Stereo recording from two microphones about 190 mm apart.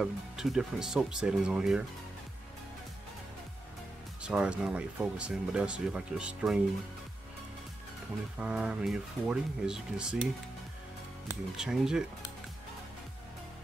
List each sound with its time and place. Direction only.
0.0 s speech: centre (ahead or behind)
4.2 s speech: 5° right (ahead or behind)
8.4 s speech: 5° right (ahead or behind)
11.5 s speech: 5° right (ahead or behind)